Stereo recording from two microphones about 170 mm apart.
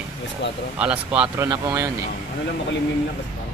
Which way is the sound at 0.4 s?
90° left.